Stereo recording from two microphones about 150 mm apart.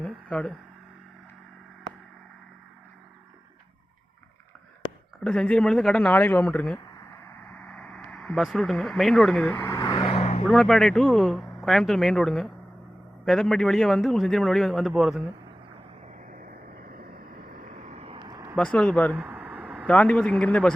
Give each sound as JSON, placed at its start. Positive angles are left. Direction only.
{"t": 0.0, "sound": "a sound", "side_deg": 5}
{"t": 5.2, "sound": "speech", "side_deg": 5}
{"t": 9.6, "sound": "vehicle", "side_deg": 20}
{"t": 10.0, "sound": "vehicle", "side_deg": 40}
{"t": 10.4, "sound": "speech", "side_deg": 0}
{"t": 16.3, "sound": "vehicle", "side_deg": -75}
{"t": 17.7, "sound": "vehicle", "side_deg": -45}
{"t": 18.5, "sound": "speech", "side_deg": 5}
{"t": 19.1, "sound": "a sound", "side_deg": -5}
{"t": 19.9, "sound": "speech", "side_deg": 5}